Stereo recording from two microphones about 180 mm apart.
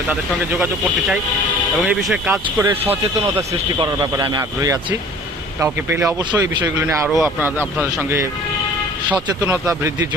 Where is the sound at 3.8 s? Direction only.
25° right (ahead or behind).